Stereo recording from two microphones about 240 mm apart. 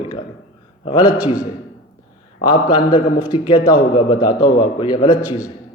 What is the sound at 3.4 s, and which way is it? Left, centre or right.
A man's voice, centre.